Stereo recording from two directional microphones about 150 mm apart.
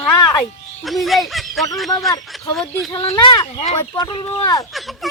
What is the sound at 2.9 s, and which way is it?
Speech, 30° left (ahead or behind).